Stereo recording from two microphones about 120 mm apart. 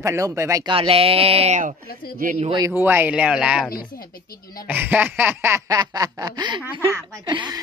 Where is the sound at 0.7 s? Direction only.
50° right (ahead or behind); by 1.8 s 80° right.